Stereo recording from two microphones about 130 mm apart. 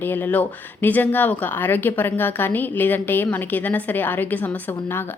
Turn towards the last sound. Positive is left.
turn(degrees=15)  # may be behind; listen again after turning